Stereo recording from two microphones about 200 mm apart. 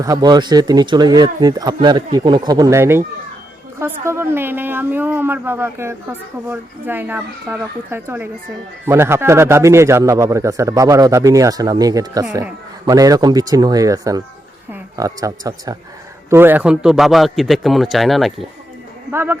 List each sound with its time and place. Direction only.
0.0 s a woman's voice: 20° right (ahead or behind); by 18.3 s centre (ahead or behind)
19.1 s a woman's voice: 10° right (ahead or behind)